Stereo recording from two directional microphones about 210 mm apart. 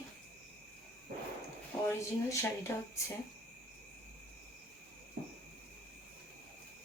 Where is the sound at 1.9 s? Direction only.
10° left (ahead or behind).